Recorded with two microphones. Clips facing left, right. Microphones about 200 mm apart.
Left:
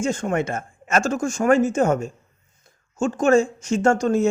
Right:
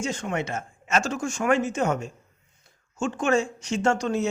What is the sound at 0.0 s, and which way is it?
Speech, 50° left (ahead or behind).